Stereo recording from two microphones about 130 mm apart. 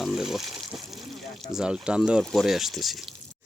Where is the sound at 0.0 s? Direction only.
5° right (ahead or behind).